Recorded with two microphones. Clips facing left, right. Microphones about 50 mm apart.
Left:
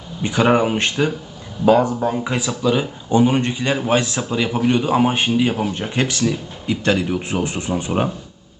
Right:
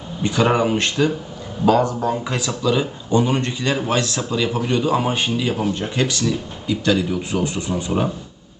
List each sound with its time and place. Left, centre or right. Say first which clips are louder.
0.2 s a man's voice: left 2 dB; centre